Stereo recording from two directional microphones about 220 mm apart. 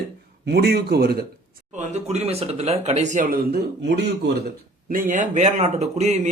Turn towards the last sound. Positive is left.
turn(degrees=-30)  # may be behind; listen again after turning